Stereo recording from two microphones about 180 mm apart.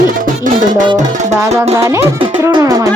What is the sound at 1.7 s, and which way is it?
Music, 15° right (ahead or behind).